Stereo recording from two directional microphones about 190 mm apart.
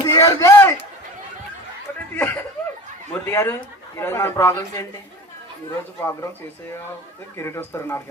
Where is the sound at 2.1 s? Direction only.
10° left (ahead or behind).